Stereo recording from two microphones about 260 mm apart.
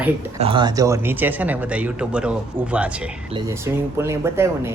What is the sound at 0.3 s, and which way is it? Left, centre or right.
Speech, centre.